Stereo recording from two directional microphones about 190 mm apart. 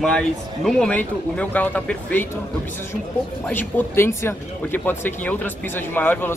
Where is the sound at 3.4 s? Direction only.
10° left (ahead or behind).